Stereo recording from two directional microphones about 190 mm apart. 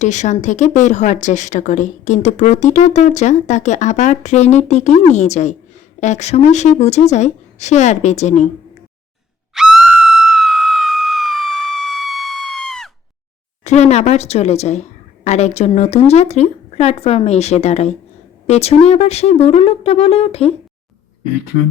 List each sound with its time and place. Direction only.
0.0 s speech: 40° left (ahead or behind)
9.6 s a sound: centre (ahead or behind)
13.7 s speech: 35° left (ahead or behind)